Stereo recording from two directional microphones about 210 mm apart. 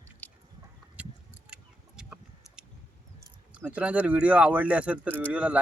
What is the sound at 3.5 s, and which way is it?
Speech, 5° right (ahead or behind).